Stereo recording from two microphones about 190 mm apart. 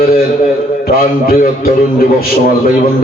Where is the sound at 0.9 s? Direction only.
50° left (ahead or behind).